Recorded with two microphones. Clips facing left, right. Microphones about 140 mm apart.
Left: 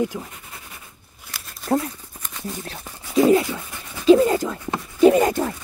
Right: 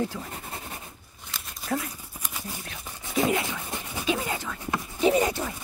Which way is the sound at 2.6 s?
35° left (ahead or behind).